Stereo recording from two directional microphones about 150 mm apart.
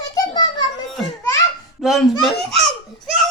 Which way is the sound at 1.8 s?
Centre (ahead or behind).